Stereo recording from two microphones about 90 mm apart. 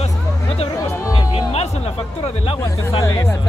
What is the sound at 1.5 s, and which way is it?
Music, 90° left.